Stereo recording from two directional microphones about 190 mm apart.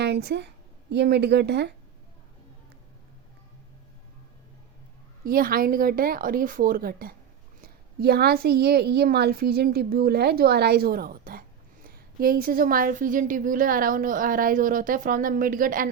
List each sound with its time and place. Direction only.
0.0 s speech: 60° right (ahead or behind)
5.2 s a woman's voice: 50° right (ahead or behind)